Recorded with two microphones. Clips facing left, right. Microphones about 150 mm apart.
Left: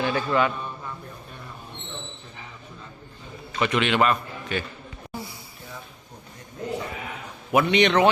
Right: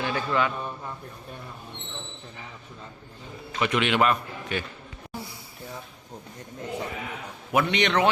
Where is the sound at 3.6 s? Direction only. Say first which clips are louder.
Left 1 dB; 5° right (ahead or behind).